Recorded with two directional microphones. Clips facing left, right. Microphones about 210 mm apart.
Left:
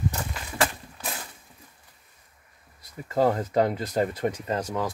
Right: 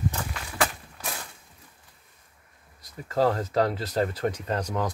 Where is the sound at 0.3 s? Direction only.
5° left (ahead or behind).